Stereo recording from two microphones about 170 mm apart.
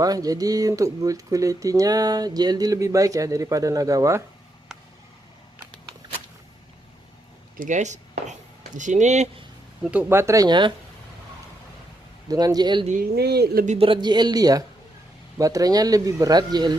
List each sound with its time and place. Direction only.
0.0 s speech: 20° right (ahead or behind)
4.7 s a sound: 5° right (ahead or behind)
7.5 s speech: 50° right (ahead or behind)
9.8 s speech: 10° right (ahead or behind); by 10.7 s 25° right (ahead or behind)
12.3 s speech: 20° right (ahead or behind)
12.9 s speech: 65° right (ahead or behind)
13.7 s speech: 35° right (ahead or behind)